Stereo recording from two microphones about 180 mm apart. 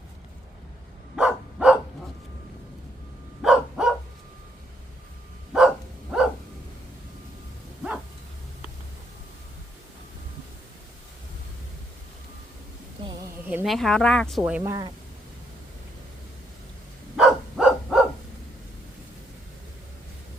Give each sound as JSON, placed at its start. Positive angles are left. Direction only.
{"t": 1.1, "sound": "dog", "side_deg": -5}
{"t": 3.4, "sound": "dog", "side_deg": 0}
{"t": 5.5, "sound": "dog", "side_deg": -5}
{"t": 13.5, "sound": "speech", "side_deg": -10}
{"t": 13.7, "sound": "speech", "side_deg": 5}
{"t": 14.6, "sound": "speech", "side_deg": -20}
{"t": 17.2, "sound": "dog", "side_deg": -5}